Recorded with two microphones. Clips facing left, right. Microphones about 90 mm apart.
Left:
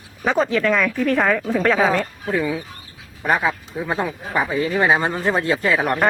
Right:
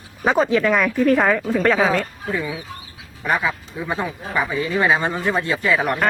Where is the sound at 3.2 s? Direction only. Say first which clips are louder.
Left 2 dB; 40° left (ahead or behind).